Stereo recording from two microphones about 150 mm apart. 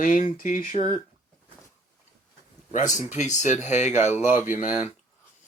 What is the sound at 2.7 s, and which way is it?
Speech, 55° left (ahead or behind).